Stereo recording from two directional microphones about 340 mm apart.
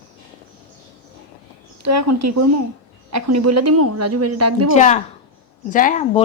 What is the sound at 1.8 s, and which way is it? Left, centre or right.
Speech, right.